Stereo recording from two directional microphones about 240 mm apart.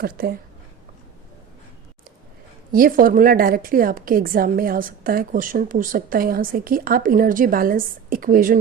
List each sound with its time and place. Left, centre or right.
0.0 s a woman's voice: right
2.7 s a woman's voice: right